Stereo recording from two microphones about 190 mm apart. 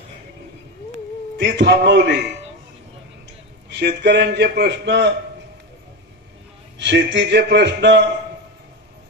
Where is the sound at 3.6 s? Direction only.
60° right (ahead or behind).